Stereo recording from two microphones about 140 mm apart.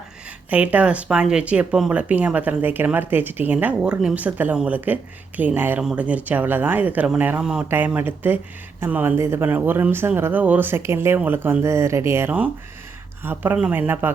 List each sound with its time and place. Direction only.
0.5 s speech: 10° right (ahead or behind)